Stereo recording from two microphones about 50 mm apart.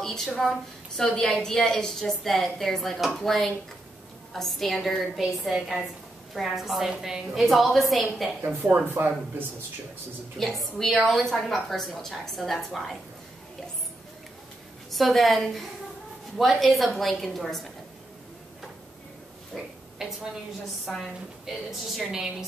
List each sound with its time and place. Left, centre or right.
0.0 s a sound: centre
0.4 s a woman's voice: centre
8.4 s speech: right
9.0 s speech: right
10.4 s a woman's voice: centre
14.9 s a woman's voice: centre
19.5 s a woman's voice: centre